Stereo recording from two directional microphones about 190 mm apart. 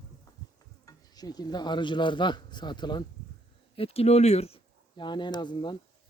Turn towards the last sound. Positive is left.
turn(degrees=25)  # may be behind; listen again after turning